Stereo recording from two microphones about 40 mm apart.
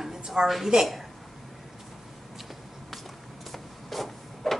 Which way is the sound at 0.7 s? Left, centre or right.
Centre.